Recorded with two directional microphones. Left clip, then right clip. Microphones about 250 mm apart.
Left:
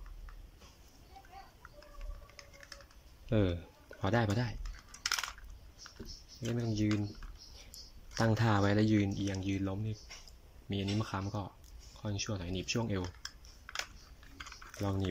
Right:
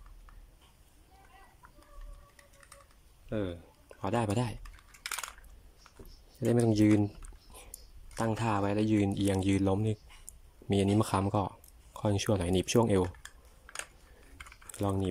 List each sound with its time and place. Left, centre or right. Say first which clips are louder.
3.3 s speech: left 3 dB; centre
6.5 s speech: right 10 dB; right
8.1 s speech: even; centre; by 13.0 s right
13.0 s typing: right 8 dB; centre
14.8 s speech: right 5 dB; centre